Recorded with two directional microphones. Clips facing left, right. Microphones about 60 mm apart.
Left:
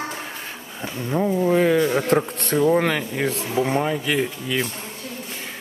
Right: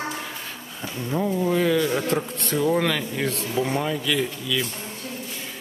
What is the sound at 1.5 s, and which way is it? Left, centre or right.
Speech, left.